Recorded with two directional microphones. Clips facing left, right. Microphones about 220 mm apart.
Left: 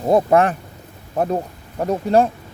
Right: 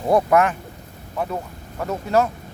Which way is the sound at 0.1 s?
25° left (ahead or behind).